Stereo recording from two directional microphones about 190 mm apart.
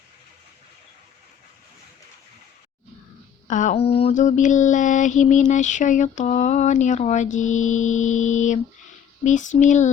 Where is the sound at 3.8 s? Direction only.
30° left (ahead or behind).